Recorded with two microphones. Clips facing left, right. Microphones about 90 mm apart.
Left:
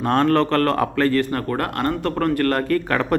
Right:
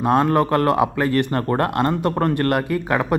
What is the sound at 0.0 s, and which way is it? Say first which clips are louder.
Speech: even; 15° right (ahead or behind).